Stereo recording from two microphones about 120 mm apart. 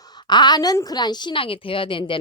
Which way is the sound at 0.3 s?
35° left (ahead or behind).